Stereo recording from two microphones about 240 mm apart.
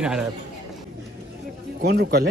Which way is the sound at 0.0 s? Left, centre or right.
Centre.